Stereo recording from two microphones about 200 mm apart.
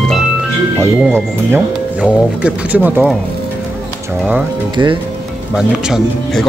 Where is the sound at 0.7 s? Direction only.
10° right (ahead or behind).